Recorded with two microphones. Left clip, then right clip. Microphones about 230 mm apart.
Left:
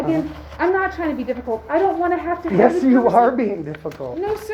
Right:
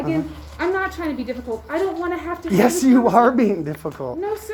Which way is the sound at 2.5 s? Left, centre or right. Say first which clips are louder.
Left 1 dB; right.